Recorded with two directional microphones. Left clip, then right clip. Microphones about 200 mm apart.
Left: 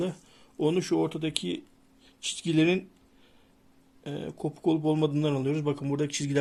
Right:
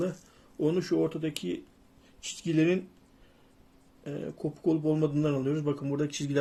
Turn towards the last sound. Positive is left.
turn(degrees=40)  # may be behind; listen again after turning